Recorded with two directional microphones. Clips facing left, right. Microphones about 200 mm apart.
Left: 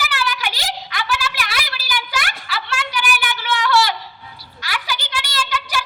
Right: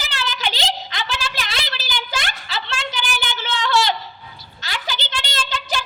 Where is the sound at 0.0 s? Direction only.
20° right (ahead or behind).